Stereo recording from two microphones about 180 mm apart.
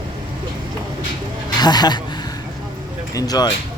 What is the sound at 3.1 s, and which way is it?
Speech, 20° left (ahead or behind).